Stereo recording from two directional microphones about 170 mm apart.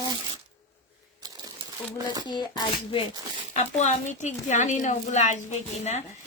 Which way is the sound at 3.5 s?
45° left (ahead or behind).